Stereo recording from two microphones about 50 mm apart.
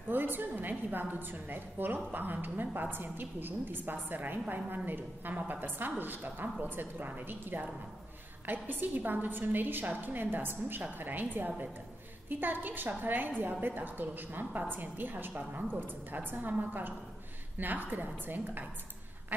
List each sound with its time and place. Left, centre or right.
0.1 s a woman's voice: right